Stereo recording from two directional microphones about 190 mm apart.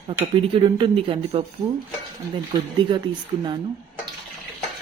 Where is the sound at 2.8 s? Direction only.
25° right (ahead or behind).